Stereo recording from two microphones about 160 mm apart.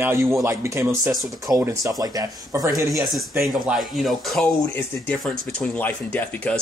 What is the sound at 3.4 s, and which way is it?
Speech, centre (ahead or behind).